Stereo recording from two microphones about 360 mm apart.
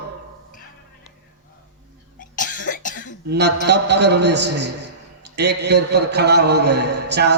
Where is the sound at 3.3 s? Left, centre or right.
Right.